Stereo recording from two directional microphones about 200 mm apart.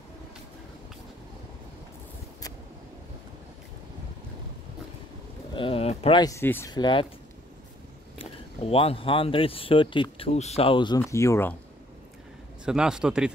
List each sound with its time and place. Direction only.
5.6 s a sound: 30° left (ahead or behind)
6.4 s speech: 10° left (ahead or behind)
6.7 s speech: 25° left (ahead or behind)
8.2 s speech: 30° left (ahead or behind)
12.6 s a man's voice: 5° right (ahead or behind)